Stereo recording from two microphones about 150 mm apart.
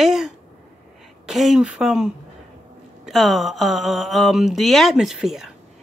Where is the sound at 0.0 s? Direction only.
5° right (ahead or behind).